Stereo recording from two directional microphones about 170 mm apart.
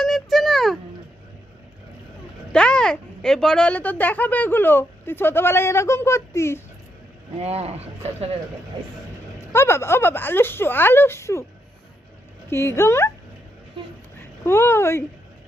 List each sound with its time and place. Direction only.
0.0 s a sound: centre (ahead or behind)
2.5 s speech: 5° left (ahead or behind)
7.3 s speech: 35° right (ahead or behind)
9.5 s speech: 15° left (ahead or behind)
12.5 s speech: 15° left (ahead or behind)
14.2 s a child's voice: 15° left (ahead or behind)